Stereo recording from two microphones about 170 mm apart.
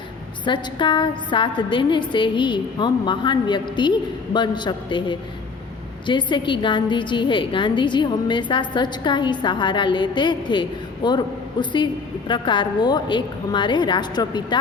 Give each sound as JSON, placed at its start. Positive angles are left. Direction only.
{"t": 0.4, "sound": "a woman's voice", "side_deg": 25}